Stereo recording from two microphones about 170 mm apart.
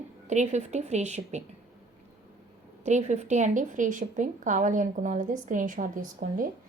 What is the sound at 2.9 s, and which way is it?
A woman's voice, 45° right (ahead or behind).